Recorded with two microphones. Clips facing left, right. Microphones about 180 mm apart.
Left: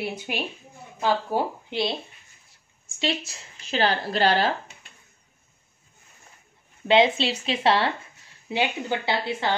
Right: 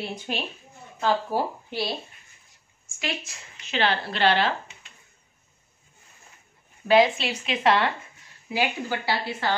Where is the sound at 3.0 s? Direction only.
35° left (ahead or behind).